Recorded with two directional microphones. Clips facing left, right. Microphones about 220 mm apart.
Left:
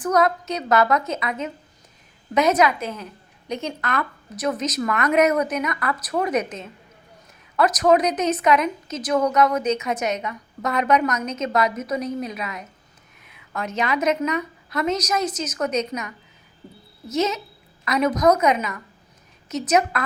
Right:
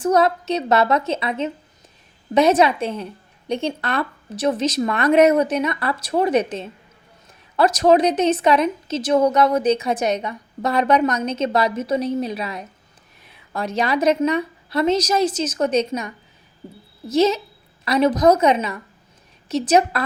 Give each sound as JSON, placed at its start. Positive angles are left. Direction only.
{"t": 0.0, "sound": "a woman's voice", "side_deg": -30}